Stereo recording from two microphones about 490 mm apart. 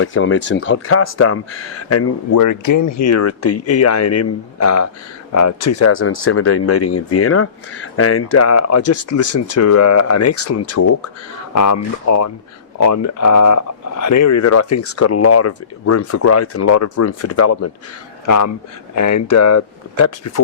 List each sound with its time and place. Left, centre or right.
0.0 s speech: left